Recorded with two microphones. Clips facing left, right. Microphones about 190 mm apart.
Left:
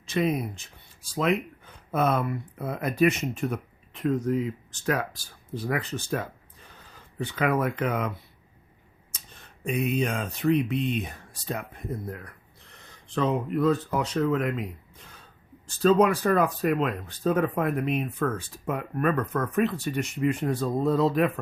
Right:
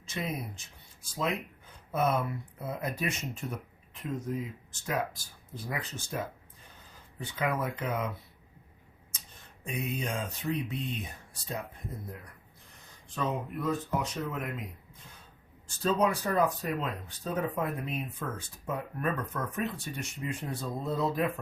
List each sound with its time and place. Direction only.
0.1 s speech: 70° left (ahead or behind)
9.3 s speech: 75° left (ahead or behind)